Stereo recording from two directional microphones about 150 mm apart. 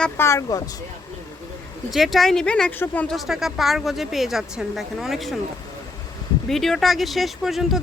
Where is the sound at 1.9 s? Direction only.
Centre (ahead or behind).